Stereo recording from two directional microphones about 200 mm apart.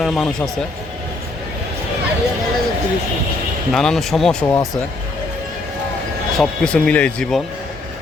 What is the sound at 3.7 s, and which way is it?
Speech, centre (ahead or behind).